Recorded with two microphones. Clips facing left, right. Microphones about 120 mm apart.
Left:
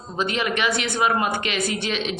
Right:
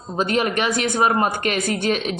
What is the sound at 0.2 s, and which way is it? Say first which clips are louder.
Speech: right 3 dB; 40° right (ahead or behind).